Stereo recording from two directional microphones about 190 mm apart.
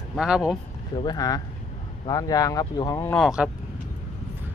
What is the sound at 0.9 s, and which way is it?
Speech, 20° left (ahead or behind).